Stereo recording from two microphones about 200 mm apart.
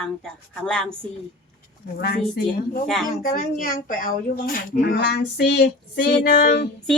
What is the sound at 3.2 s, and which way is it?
Speech, 45° left (ahead or behind).